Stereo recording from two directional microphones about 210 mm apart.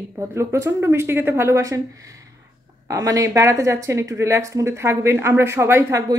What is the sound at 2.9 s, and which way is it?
Speech, 15° right (ahead or behind).